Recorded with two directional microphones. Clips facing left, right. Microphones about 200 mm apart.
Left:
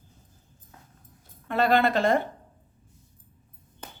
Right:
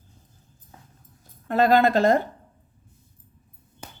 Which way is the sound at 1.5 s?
40° right (ahead or behind).